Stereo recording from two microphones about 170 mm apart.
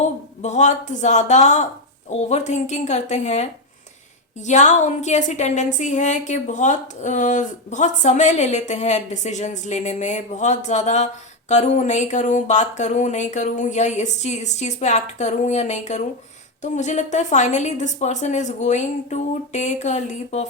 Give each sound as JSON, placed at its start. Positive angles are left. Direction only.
{"t": 0.0, "sound": "a woman's voice", "side_deg": 45}